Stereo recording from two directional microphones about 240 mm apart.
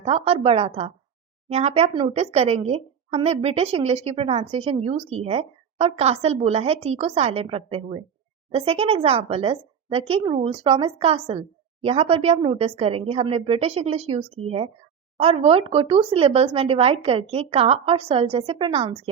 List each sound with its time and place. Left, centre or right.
0.0 s a woman's voice: right